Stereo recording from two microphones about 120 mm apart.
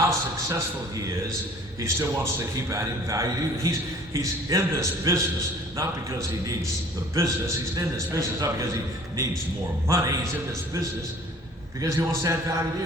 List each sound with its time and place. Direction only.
0.1 s a man's voice: 25° right (ahead or behind)
9.8 s a man's voice: 25° right (ahead or behind)
11.8 s a man's voice: 25° right (ahead or behind)